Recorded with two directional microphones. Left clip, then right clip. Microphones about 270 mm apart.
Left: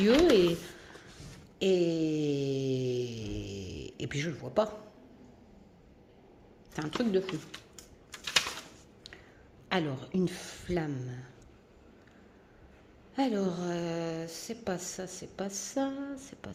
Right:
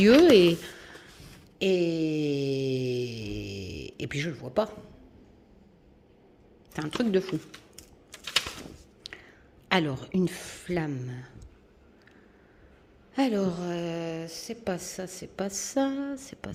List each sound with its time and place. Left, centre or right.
0.0 s a sound: right; by 4.8 s centre
6.7 s a woman's voice: centre
7.8 s typing: centre
9.0 s a sound: centre
9.6 s a woman's voice: centre
13.1 s a woman's voice: centre